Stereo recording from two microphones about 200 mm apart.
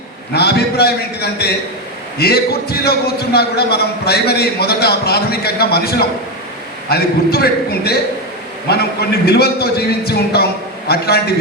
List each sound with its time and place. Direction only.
0.3 s a man's voice: 55° left (ahead or behind)